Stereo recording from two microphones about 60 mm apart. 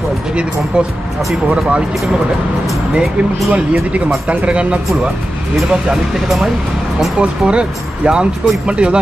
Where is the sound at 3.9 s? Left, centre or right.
Right.